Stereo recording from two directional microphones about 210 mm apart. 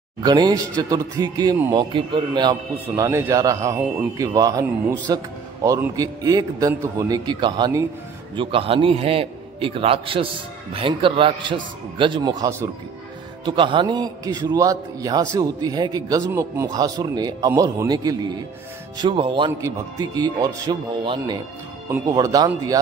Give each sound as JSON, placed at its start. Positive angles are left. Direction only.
{"t": 0.2, "sound": "a man's voice", "side_deg": -20}